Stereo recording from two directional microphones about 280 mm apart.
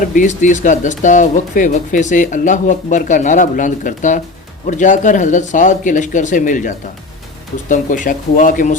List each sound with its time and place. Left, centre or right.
0.0 s speech: left